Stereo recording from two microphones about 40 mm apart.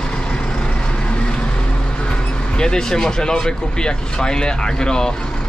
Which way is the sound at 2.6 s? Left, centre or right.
Centre.